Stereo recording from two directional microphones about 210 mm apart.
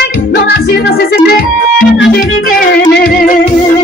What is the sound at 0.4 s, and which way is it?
Music, 50° left (ahead or behind).